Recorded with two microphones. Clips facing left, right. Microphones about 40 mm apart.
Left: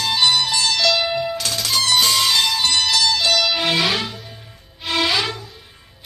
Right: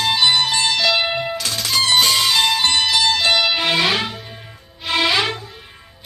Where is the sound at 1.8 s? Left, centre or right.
Right.